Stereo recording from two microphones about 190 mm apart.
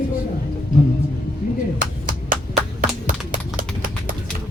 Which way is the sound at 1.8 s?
45° right (ahead or behind).